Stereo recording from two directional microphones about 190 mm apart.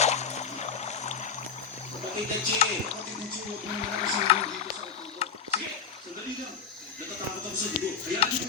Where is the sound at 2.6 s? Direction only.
35° left (ahead or behind).